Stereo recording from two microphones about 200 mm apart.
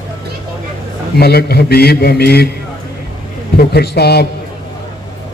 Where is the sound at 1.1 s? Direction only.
50° left (ahead or behind).